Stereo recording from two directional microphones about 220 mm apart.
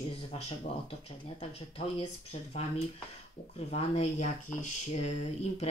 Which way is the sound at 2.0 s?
25° left (ahead or behind).